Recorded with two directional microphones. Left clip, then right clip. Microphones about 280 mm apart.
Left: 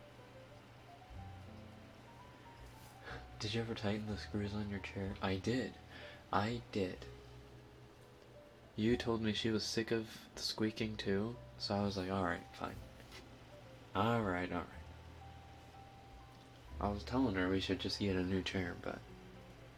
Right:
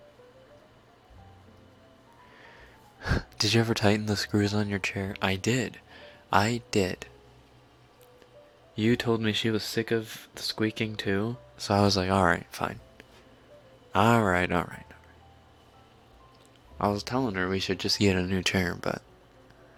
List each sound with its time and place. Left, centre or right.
3.0 s speech: right
8.7 s speech: right
11.7 s speech: right
13.9 s speech: right
16.7 s speech: right
18.2 s speech: right